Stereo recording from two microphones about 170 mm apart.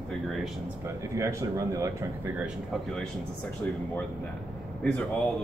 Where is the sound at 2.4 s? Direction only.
Centre (ahead or behind).